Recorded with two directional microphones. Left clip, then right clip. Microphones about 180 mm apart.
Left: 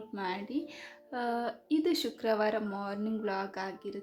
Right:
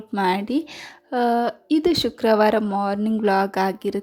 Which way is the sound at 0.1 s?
50° right (ahead or behind).